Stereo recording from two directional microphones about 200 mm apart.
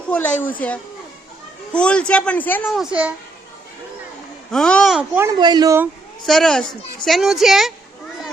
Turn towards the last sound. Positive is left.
turn(degrees=0)  # may be behind; listen again after turning